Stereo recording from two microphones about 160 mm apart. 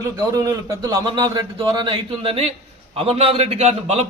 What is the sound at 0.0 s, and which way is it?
A man's voice, 20° right (ahead or behind).